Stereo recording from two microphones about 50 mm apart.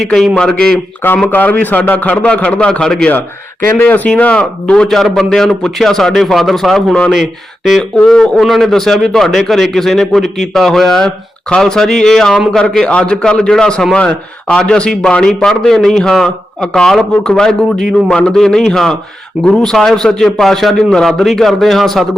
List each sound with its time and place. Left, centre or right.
0.3 s a man's voice: centre
1.0 s a man's voice: left
2.8 s a man's voice: centre
3.8 s a man's voice: left; by 8.2 s centre
8.2 s a man's voice: centre